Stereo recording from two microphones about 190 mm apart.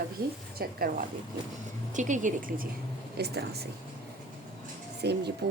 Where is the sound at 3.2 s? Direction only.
60° right (ahead or behind).